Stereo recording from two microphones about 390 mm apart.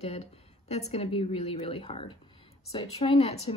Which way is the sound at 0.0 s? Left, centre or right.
Centre.